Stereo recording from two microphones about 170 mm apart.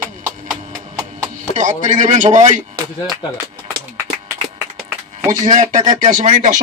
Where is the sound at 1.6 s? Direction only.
45° right (ahead or behind).